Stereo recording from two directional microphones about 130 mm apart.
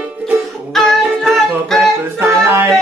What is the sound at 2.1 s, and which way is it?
Music, 15° right (ahead or behind).